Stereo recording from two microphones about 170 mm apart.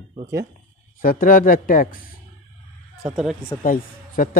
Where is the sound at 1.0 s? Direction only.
50° left (ahead or behind).